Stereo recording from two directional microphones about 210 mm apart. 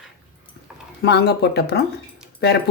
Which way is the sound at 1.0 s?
50° left (ahead or behind).